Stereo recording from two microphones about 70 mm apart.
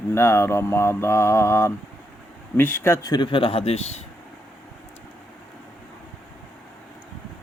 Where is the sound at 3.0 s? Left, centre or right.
Left.